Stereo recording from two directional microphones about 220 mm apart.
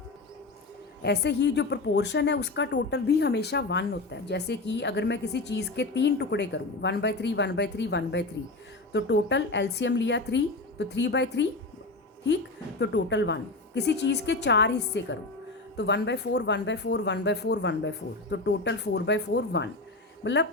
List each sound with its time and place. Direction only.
1.0 s a woman's voice: 50° left (ahead or behind)
12.8 s a woman's voice: 55° left (ahead or behind)